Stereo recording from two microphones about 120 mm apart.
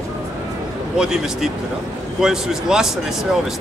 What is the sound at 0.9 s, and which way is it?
Speech, 5° right (ahead or behind).